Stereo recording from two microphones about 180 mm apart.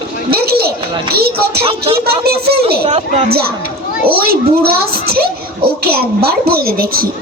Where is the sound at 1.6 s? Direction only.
30° right (ahead or behind).